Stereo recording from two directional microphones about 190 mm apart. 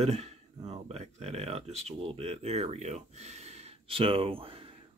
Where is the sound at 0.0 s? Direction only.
35° right (ahead or behind).